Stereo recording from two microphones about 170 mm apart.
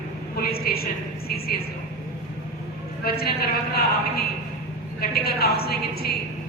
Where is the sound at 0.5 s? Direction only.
65° left (ahead or behind).